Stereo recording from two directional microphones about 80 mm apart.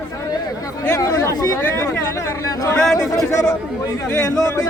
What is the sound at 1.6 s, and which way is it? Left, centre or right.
Chatter, left.